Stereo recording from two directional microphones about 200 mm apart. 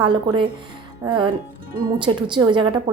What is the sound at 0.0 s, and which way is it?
Speech, 25° right (ahead or behind).